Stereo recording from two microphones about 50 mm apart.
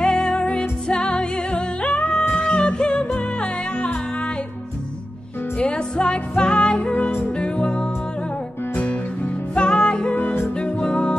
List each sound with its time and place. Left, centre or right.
0.0 s music: left
1.8 s singing: left
2.3 s music: left
5.6 s music: left